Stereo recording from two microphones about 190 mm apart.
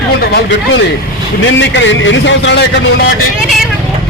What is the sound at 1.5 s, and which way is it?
A man's voice, 70° left (ahead or behind).